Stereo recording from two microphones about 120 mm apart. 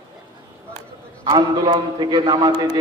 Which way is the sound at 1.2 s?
35° right (ahead or behind).